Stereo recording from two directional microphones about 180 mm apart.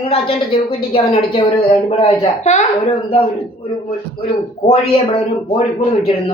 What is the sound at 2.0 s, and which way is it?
Speech, 40° left (ahead or behind).